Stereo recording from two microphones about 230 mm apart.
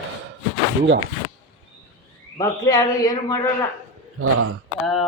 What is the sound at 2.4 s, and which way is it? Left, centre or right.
A man's voice, centre.